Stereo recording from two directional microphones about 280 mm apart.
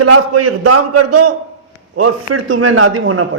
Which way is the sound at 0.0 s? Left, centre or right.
Right.